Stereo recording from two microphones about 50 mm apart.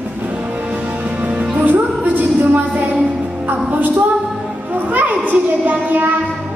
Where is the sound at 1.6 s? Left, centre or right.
Right.